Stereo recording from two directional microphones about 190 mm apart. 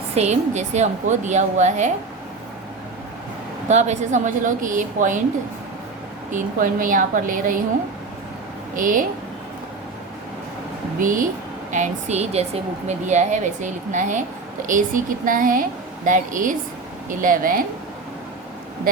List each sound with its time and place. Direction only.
0.1 s a woman's voice: 35° right (ahead or behind)
3.7 s a woman's voice: 35° right (ahead or behind)
6.3 s a woman's voice: 45° right (ahead or behind)
8.7 s a woman's voice: 45° right (ahead or behind)
11.0 s a woman's voice: 45° right (ahead or behind)